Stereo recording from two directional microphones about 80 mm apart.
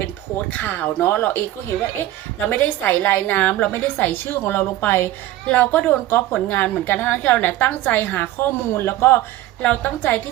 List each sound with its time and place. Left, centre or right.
0.5 s a woman's voice: left
2.5 s a woman's voice: left